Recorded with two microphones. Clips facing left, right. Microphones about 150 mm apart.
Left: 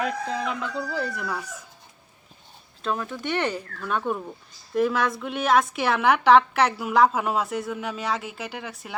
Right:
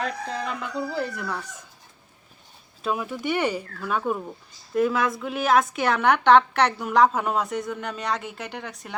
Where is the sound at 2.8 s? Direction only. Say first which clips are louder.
Right 1 dB; 10° right (ahead or behind).